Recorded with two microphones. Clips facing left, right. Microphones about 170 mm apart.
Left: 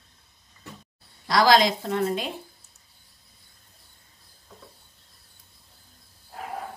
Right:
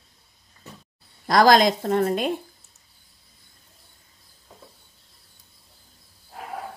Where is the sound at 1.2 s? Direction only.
45° right (ahead or behind).